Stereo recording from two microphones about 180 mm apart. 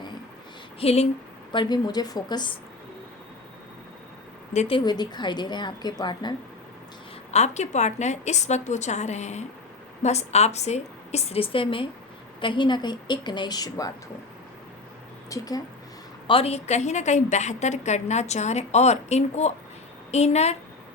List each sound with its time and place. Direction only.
0.8 s a woman's voice: 35° left (ahead or behind)
1.5 s speech: 20° left (ahead or behind)
4.5 s a woman's voice: 40° left (ahead or behind)
4.9 s speech: 25° left (ahead or behind)
7.3 s a woman's voice: 40° left (ahead or behind); by 13.9 s 20° left (ahead or behind)
15.3 s speech: 20° left (ahead or behind)
16.2 s a woman's voice: 30° left (ahead or behind)